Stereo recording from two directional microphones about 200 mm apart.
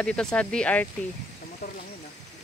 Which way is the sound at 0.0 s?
5° left (ahead or behind).